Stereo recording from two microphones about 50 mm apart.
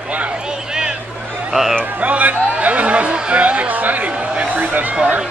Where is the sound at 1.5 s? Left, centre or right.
Centre.